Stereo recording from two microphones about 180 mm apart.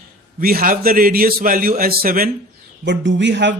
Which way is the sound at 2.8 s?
80° right.